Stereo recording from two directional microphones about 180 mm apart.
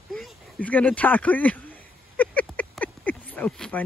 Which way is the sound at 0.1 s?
Centre (ahead or behind).